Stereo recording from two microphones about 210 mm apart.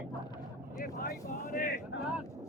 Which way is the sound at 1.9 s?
60° left (ahead or behind).